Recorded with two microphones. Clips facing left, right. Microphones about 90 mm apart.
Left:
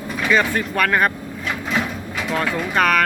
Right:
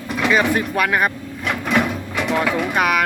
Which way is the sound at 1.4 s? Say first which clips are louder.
Right 4 dB; 65° right (ahead or behind).